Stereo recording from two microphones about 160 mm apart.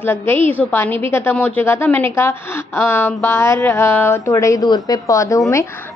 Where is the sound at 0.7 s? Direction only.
15° left (ahead or behind).